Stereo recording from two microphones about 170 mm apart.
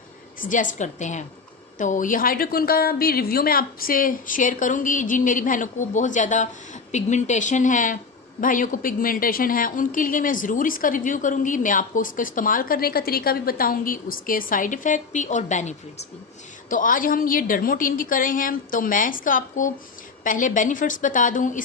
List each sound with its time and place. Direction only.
0.3 s a woman's voice: 50° left (ahead or behind)